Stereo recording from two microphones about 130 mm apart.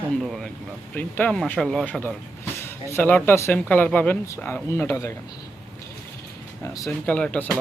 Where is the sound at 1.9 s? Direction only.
15° left (ahead or behind).